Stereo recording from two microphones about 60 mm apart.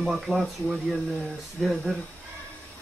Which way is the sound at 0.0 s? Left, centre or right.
Centre.